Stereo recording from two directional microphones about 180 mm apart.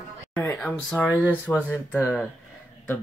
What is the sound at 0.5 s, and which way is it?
Speech, 5° left (ahead or behind).